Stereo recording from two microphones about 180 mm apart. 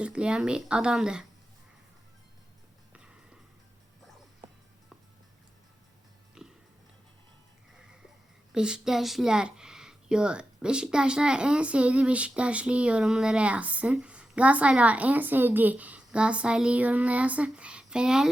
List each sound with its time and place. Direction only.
0.0 s a woman's voice: 5° right (ahead or behind)
6.4 s music: 5° right (ahead or behind)
8.5 s a woman's voice: 5° right (ahead or behind)